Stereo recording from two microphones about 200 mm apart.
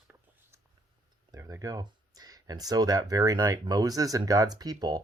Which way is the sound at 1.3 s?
15° right (ahead or behind).